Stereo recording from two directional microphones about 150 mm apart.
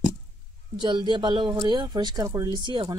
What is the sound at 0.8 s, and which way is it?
Speech, 30° right (ahead or behind).